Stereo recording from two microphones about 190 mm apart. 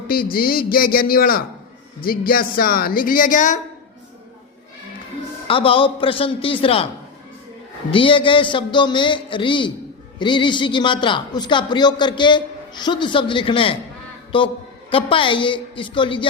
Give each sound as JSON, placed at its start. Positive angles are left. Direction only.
{"t": 0.1, "sound": "a woman's voice", "side_deg": 50}
{"t": 5.5, "sound": "a man's voice", "side_deg": 30}
{"t": 7.9, "sound": "a man's voice", "side_deg": 30}